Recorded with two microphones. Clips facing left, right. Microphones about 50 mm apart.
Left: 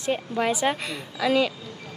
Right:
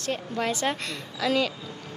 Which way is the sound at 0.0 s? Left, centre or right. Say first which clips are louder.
Left 4 dB; centre.